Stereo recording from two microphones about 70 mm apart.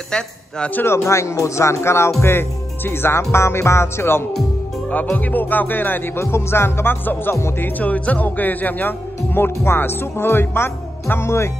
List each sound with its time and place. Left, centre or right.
0.1 s speech: centre
0.7 s speech: left
4.9 s music: left
7.3 s speech: left
7.8 s speech: centre; by 11.5 s left